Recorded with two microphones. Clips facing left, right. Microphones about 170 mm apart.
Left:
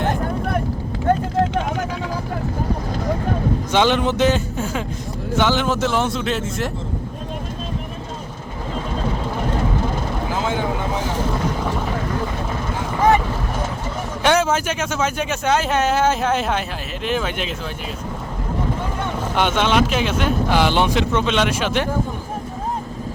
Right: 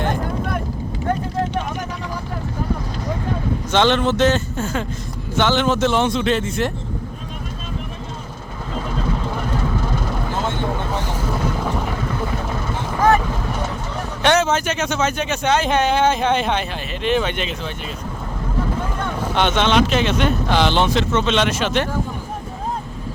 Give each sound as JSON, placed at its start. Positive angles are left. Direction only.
{"t": 3.7, "sound": "speech", "side_deg": 10}
{"t": 10.1, "sound": "vehicle", "side_deg": 5}
{"t": 11.3, "sound": "vehicle", "side_deg": -5}
{"t": 13.0, "sound": "vehicle", "side_deg": 15}
{"t": 14.2, "sound": "speech", "side_deg": 10}
{"t": 19.4, "sound": "speech", "side_deg": 5}